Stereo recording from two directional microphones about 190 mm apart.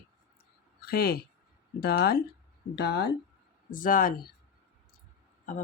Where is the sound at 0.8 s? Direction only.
55° left (ahead or behind).